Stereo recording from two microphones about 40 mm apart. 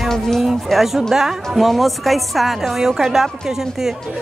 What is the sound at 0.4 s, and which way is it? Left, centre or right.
A woman's voice, centre.